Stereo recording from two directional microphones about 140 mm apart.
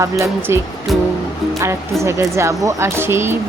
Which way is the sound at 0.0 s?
20° right (ahead or behind).